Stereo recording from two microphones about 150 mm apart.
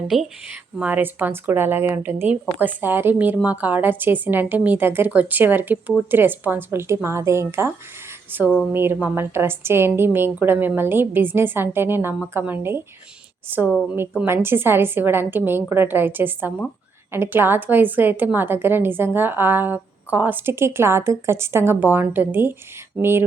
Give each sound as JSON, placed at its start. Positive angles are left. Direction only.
{"t": 0.1, "sound": "speech", "side_deg": 0}
{"t": 0.8, "sound": "a woman's voice", "side_deg": -10}